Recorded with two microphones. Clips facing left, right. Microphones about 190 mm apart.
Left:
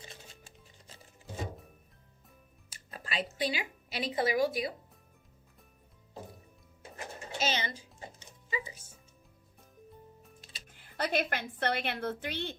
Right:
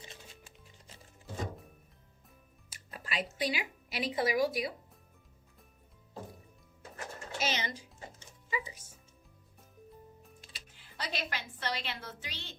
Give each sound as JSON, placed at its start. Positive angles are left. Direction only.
{"t": 2.9, "sound": "a woman's voice", "side_deg": 25}
{"t": 6.9, "sound": "pigeon", "side_deg": 25}
{"t": 8.4, "sound": "music", "side_deg": 25}
{"t": 10.7, "sound": "a woman's voice", "side_deg": 55}